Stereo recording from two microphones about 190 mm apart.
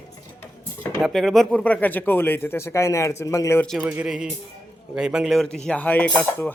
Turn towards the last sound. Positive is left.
turn(degrees=10)  # may be behind; listen again after turning